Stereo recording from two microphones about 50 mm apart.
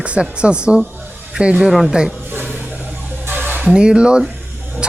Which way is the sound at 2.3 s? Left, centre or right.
Right.